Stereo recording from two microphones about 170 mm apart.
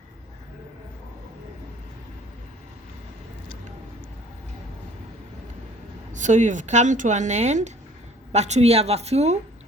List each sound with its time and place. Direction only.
6.1 s a woman's voice: 45° right (ahead or behind)